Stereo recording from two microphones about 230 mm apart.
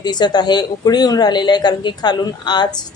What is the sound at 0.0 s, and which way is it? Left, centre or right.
Speech, centre.